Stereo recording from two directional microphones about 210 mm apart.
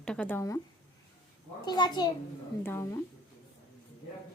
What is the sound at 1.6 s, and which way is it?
A child's voice, 20° left (ahead or behind).